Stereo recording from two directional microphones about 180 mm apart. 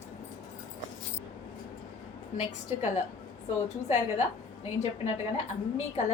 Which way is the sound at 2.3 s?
40° left (ahead or behind).